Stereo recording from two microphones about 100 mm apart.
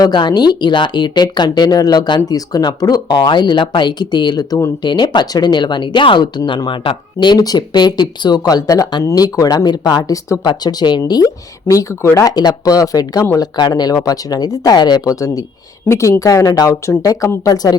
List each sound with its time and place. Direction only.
0.0 s speech: 45° left (ahead or behind)
10.4 s speech: 45° left (ahead or behind)